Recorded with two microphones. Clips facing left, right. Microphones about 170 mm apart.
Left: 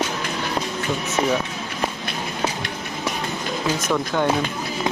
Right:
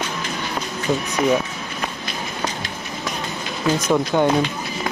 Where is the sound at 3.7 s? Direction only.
15° right (ahead or behind).